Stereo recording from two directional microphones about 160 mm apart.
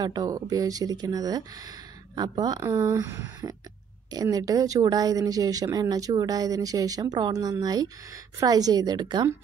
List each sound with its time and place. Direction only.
0.0 s speech: 25° right (ahead or behind)